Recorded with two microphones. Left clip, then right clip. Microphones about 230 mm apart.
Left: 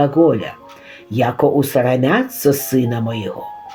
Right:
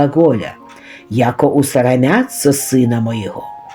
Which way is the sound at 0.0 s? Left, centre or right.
Right.